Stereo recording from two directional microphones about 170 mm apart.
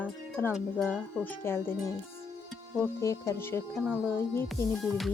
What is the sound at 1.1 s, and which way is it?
Speech, 15° left (ahead or behind).